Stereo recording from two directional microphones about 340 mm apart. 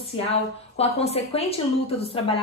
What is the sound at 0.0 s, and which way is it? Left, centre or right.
A woman's voice, centre.